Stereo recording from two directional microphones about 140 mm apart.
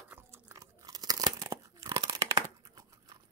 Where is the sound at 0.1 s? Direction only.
20° right (ahead or behind).